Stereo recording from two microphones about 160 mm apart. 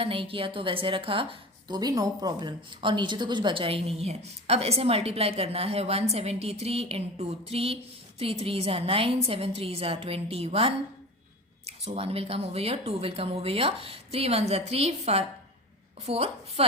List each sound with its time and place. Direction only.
0.0 s a woman's voice: 35° right (ahead or behind)